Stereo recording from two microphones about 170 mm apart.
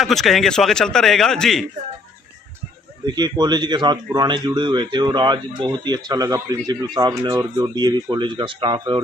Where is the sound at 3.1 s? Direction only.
25° right (ahead or behind).